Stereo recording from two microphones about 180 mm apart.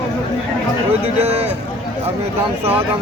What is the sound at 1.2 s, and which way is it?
Speech, 35° right (ahead or behind).